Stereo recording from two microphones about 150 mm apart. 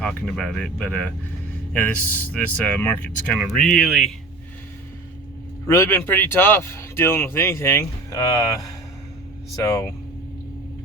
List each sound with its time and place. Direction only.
0.0 s speech: 5° left (ahead or behind)
5.6 s speech: 20° left (ahead or behind)